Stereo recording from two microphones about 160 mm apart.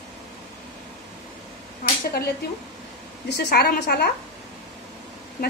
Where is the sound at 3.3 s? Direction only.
85° left.